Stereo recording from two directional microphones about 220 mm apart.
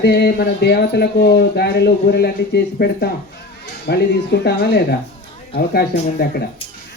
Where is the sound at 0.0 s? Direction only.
45° left (ahead or behind).